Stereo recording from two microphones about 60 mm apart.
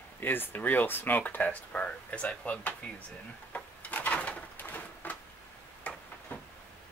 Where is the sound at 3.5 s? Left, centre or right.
Left.